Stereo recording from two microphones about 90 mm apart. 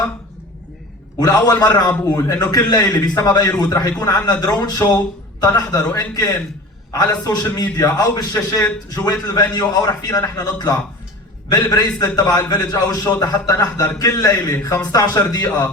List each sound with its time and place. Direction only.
1.2 s a man's voice: 45° left (ahead or behind)